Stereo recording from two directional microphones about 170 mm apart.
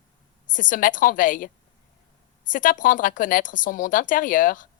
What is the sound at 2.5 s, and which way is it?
Speech, 50° left (ahead or behind).